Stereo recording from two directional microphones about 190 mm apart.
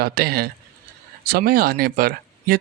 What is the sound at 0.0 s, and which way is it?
Speech, 55° right (ahead or behind).